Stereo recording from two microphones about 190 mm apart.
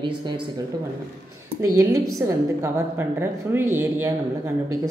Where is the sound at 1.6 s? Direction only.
15° right (ahead or behind).